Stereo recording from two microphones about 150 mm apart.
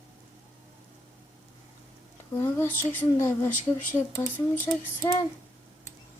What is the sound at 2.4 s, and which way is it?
Speech, 15° left (ahead or behind).